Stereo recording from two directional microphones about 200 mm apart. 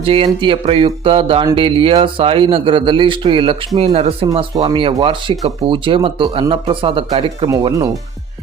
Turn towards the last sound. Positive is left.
turn(degrees=-20)  # may be behind; listen again after turning